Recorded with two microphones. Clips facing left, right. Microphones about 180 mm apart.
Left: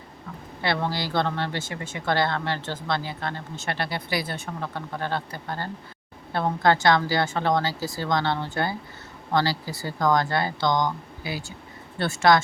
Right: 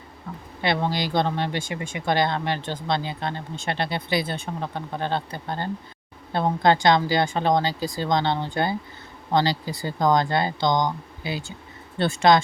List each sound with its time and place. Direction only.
0.6 s speech: 20° right (ahead or behind)